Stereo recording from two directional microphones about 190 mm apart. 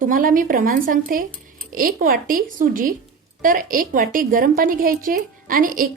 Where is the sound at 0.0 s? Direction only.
45° right (ahead or behind).